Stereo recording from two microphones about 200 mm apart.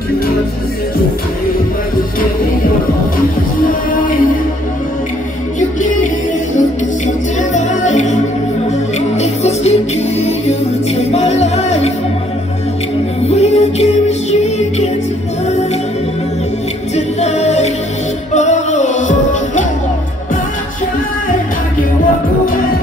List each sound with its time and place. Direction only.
3.6 s music: 45° left (ahead or behind)
7.5 s music: 35° left (ahead or behind)
13.3 s music: 35° left (ahead or behind)
16.9 s music: 35° left (ahead or behind)